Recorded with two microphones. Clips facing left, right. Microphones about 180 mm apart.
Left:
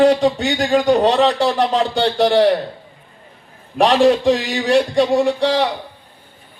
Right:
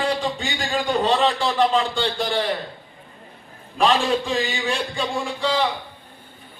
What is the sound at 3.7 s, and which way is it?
A man's voice, 70° left (ahead or behind).